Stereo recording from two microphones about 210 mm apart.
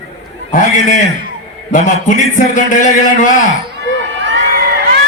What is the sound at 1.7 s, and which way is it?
A man's voice, 35° left (ahead or behind).